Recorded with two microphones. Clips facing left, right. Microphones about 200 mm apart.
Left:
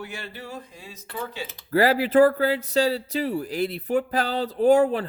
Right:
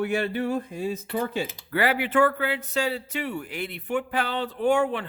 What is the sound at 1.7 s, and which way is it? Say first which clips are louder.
Speech: left 6 dB; 35° left (ahead or behind).